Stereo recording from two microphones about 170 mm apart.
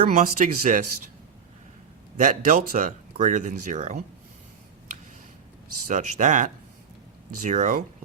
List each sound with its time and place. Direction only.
0.1 s speech: 55° right (ahead or behind)
2.1 s speech: 50° right (ahead or behind)
5.9 s speech: 50° right (ahead or behind)